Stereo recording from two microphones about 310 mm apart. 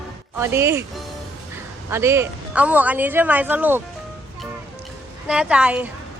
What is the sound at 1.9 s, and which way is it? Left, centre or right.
A woman's voice, centre.